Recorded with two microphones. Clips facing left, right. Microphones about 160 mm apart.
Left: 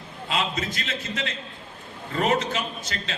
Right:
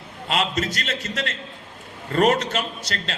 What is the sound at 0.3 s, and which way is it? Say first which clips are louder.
Speech: right 4 dB; 75° right (ahead or behind).